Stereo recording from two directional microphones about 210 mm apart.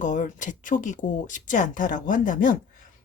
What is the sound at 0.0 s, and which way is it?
Speech, 35° left (ahead or behind).